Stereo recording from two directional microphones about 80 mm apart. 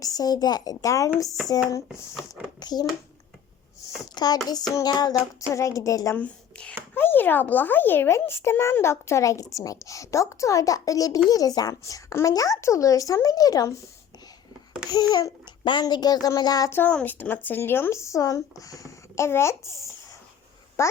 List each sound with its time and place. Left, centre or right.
0.0 s speech: left
2.6 s a child's voice: left
4.1 s a child's voice: left
5.5 s a child's voice: left
6.1 s speech: centre
6.9 s a child's voice: left
14.8 s a child's voice: left
16.6 s a child's voice: left
20.8 s speech: left